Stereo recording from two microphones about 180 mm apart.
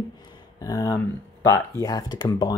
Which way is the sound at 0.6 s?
20° left (ahead or behind).